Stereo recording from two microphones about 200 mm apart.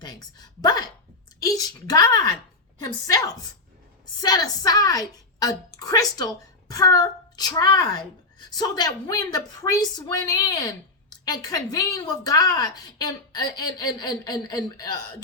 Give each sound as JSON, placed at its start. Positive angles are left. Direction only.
{"t": 0.0, "sound": "a woman's voice", "side_deg": 20}